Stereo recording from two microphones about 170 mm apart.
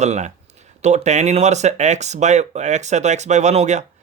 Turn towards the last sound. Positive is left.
turn(degrees=-40)  # may be behind; listen again after turning